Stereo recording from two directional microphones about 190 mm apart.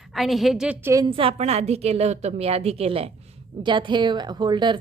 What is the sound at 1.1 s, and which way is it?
A woman's voice, 30° right (ahead or behind).